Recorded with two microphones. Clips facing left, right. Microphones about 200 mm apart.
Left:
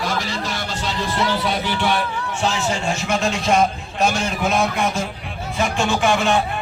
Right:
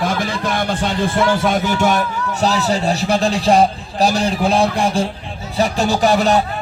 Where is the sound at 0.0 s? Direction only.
55° right (ahead or behind).